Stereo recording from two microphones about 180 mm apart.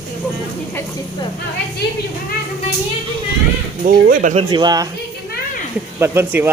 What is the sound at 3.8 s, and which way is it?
Speech, 50° right (ahead or behind).